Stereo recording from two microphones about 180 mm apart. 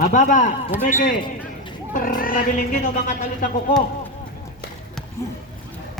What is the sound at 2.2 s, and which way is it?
Speech, 50° left (ahead or behind).